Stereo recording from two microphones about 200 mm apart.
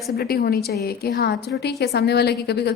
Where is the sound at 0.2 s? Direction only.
50° left (ahead or behind).